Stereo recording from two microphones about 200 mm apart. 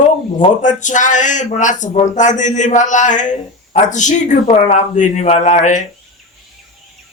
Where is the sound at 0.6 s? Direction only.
40° left (ahead or behind).